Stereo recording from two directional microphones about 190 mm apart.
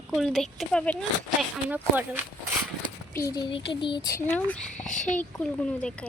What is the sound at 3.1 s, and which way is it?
A child's voice, 20° left (ahead or behind).